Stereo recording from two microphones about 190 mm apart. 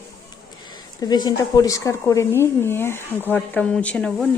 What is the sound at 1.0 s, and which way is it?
Speech, 20° left (ahead or behind).